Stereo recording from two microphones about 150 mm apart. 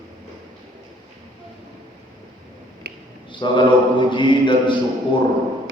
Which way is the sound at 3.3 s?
30° left (ahead or behind).